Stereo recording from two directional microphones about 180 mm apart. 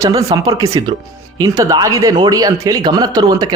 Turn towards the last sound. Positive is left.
turn(degrees=-20)  # may be behind; listen again after turning